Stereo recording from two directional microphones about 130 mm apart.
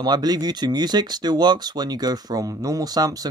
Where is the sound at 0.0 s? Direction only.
30° right (ahead or behind).